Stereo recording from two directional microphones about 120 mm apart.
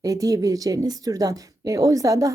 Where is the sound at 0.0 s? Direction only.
30° right (ahead or behind).